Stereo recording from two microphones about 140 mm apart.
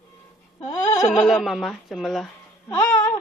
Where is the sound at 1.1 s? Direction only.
Centre (ahead or behind).